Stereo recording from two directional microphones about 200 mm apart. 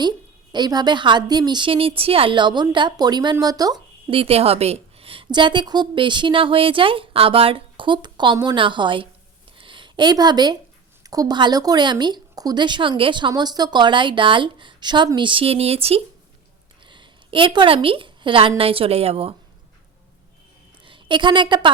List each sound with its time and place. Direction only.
0.5 s a woman's voice: 20° right (ahead or behind)
9.6 s a sound: 25° right (ahead or behind)
11.1 s a woman's voice: 20° right (ahead or behind)
20.8 s a woman's voice: 25° right (ahead or behind)